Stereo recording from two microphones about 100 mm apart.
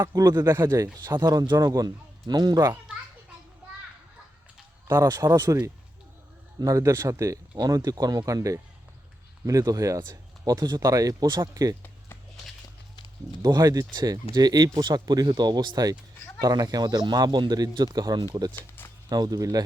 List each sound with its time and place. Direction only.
0.1 s a man's voice: 35° right (ahead or behind)
4.9 s speech: 25° right (ahead or behind)
5.1 s a man's voice: 40° right (ahead or behind)
13.4 s a man's voice: 40° right (ahead or behind)